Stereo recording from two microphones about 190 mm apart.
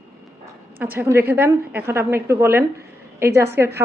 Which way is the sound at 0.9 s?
10° right (ahead or behind).